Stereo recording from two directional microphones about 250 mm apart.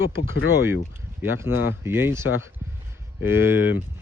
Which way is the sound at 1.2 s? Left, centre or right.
Centre.